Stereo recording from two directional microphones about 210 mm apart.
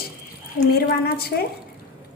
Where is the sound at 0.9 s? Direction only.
45° left (ahead or behind).